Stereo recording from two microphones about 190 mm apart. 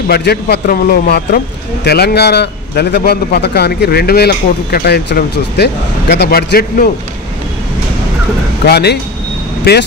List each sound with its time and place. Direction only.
0.1 s a man's voice: 60° left (ahead or behind)
8.6 s a man's voice: 60° left (ahead or behind)